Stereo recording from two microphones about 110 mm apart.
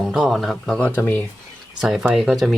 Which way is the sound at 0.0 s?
Centre (ahead or behind).